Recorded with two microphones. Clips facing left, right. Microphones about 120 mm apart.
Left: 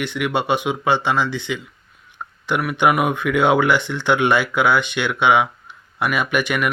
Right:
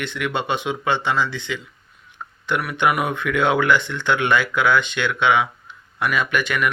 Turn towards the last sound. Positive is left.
turn(degrees=15)  # may be behind; listen again after turning